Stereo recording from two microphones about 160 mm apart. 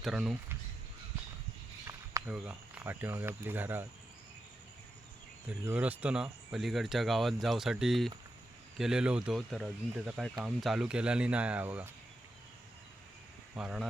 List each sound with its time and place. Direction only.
0.0 s speech: centre (ahead or behind)
1.9 s a sound: 20° right (ahead or behind)
2.3 s speech: 5° right (ahead or behind)
5.6 s speech: 10° right (ahead or behind)
13.6 s speech: 5° right (ahead or behind)